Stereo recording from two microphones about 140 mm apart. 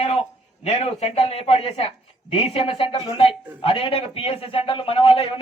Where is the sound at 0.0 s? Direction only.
45° left (ahead or behind).